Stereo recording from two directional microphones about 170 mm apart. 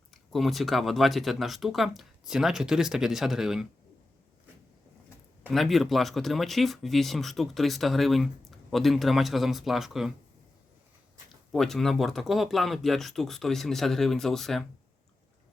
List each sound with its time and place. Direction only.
0.1 s speech: centre (ahead or behind)
5.5 s speech: centre (ahead or behind)
11.5 s speech: centre (ahead or behind)